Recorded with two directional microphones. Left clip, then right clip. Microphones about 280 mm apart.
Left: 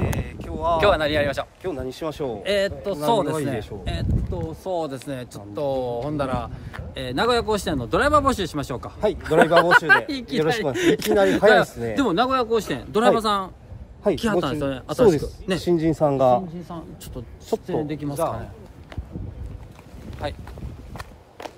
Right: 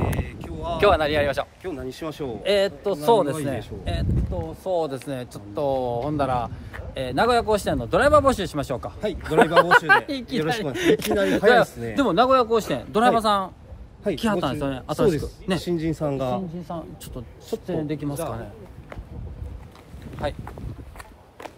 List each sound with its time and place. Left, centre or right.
0.1 s a sound: left
0.7 s speech: centre
1.6 s speech: centre
2.4 s a man's voice: centre
15.0 s speech: centre
16.6 s speech: centre
20.2 s speech: centre